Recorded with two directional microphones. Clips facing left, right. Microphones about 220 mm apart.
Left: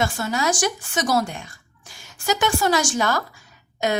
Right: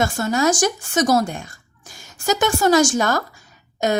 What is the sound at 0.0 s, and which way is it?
A woman's voice, 45° right (ahead or behind).